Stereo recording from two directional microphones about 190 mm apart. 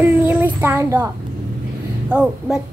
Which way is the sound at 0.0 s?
10° right (ahead or behind).